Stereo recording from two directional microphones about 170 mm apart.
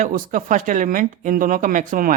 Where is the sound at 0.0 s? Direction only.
50° right (ahead or behind).